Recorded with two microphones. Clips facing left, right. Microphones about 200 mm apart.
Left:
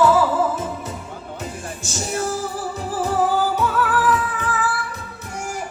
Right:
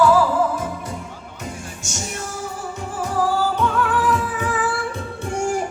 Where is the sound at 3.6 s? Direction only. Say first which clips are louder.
Even; 5° left (ahead or behind).